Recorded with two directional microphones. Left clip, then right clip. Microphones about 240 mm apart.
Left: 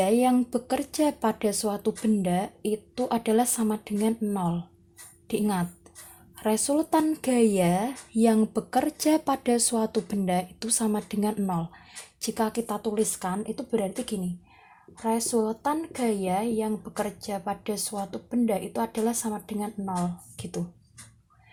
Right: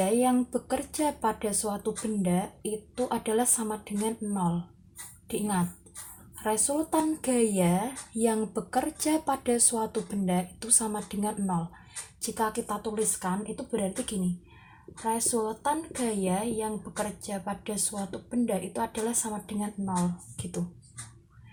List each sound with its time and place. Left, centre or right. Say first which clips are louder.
0.0 s speech: left 3 dB; left